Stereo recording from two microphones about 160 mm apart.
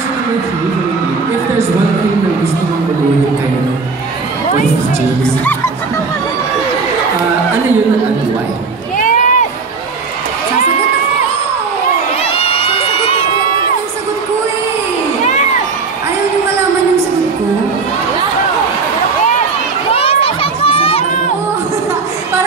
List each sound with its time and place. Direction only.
8.9 s a sound: 55° left (ahead or behind)
12.2 s crowd: 40° left (ahead or behind)
19.9 s crowd: 35° left (ahead or behind)